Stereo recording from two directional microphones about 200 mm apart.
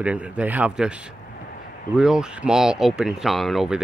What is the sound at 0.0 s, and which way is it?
Speech, 5° right (ahead or behind).